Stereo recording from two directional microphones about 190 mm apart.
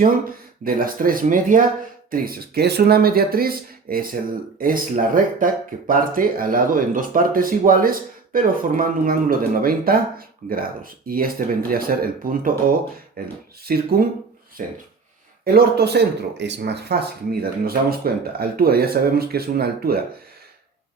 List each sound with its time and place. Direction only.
0.0 s speech: 50° right (ahead or behind)
15.5 s speech: 60° right (ahead or behind)